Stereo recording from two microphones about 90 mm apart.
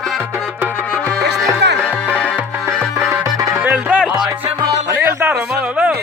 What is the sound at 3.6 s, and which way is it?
Music, 15° right (ahead or behind).